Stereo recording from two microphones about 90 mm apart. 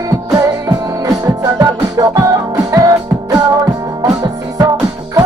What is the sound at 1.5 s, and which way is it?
Music, 40° right (ahead or behind).